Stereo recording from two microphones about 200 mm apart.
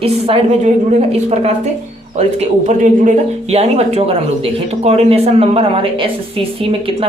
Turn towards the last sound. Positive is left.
turn(degrees=-25)  # may be behind; listen again after turning